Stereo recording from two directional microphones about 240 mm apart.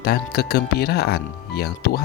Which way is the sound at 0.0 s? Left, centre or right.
Left.